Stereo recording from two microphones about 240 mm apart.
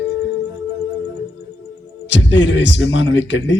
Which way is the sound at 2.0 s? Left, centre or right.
Left.